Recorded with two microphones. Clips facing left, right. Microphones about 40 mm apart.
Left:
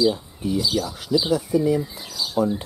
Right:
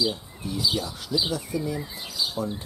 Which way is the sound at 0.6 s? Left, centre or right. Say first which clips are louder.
Left 3 dB; centre.